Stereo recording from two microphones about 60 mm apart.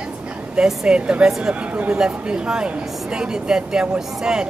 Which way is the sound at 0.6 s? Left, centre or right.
Centre.